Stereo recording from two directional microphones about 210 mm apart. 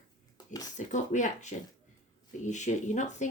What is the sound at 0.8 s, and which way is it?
Speech, 35° left (ahead or behind).